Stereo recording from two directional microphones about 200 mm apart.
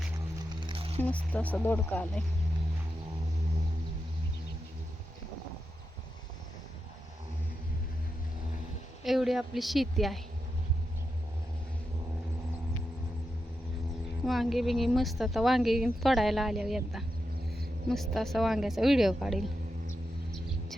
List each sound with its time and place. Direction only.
0.5 s a sound: 25° right (ahead or behind)
1.0 s speech: 5° left (ahead or behind)
9.0 s a woman's voice: centre (ahead or behind)
14.3 s a woman's voice: centre (ahead or behind)